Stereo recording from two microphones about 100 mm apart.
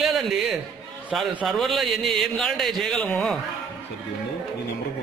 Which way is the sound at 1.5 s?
Centre (ahead or behind).